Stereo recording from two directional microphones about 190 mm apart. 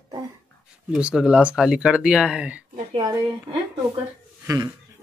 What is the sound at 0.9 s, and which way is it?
Speech, 5° right (ahead or behind).